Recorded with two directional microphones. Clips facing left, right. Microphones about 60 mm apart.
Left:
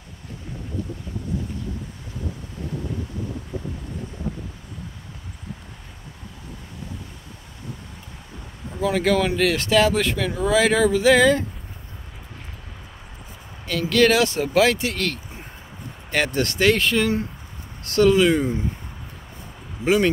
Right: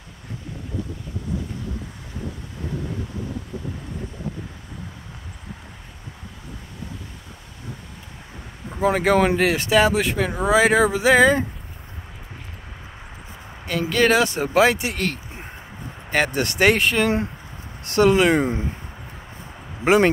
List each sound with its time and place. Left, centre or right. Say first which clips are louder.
8.7 s speech: right 2 dB; right
13.8 s speech: left 1 dB; centre
16.5 s speech: right 2 dB; right
18.3 s speech: right 1 dB; right
19.8 s speech: right 3 dB; right